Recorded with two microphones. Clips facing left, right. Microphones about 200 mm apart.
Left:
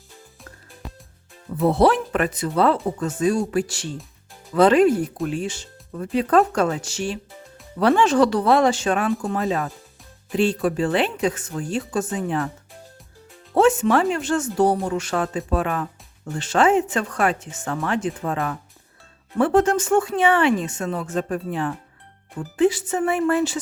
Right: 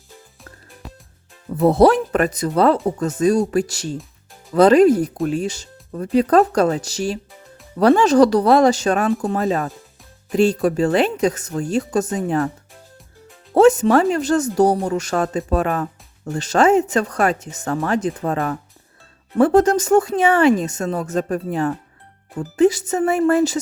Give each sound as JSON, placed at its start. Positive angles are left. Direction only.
{"t": 0.8, "sound": "music", "side_deg": 0}
{"t": 1.6, "sound": "speech", "side_deg": -40}
{"t": 13.5, "sound": "speech", "side_deg": -40}